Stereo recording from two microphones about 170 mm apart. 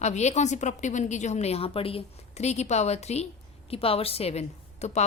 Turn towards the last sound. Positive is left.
turn(degrees=40)  # may be behind; listen again after turning